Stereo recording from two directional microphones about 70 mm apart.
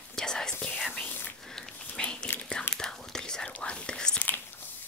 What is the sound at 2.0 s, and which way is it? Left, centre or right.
Whispering, centre.